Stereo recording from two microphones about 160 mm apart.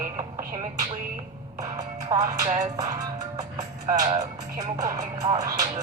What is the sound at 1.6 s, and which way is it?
Music, 20° right (ahead or behind).